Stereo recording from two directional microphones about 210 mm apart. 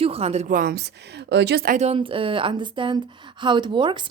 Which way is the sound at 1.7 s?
30° right (ahead or behind).